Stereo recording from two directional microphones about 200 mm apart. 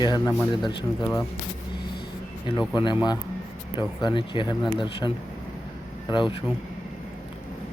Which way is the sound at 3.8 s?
25° left (ahead or behind).